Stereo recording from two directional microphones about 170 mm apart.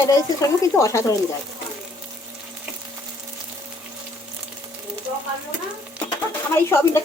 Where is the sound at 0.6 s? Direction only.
20° left (ahead or behind).